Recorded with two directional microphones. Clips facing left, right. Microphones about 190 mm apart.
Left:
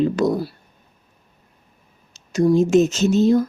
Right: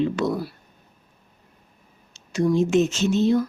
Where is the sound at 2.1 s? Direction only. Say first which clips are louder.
Left 5 dB; 40° left (ahead or behind).